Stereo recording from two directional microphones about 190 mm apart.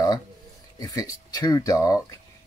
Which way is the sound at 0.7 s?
20° left (ahead or behind).